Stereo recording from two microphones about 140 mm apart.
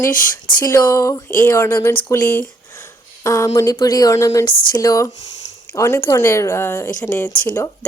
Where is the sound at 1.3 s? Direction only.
15° left (ahead or behind).